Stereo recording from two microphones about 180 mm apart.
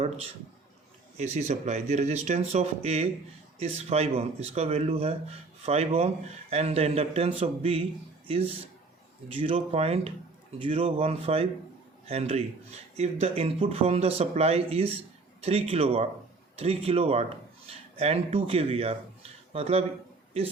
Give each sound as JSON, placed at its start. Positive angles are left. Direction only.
{"t": 1.1, "sound": "speech", "side_deg": -40}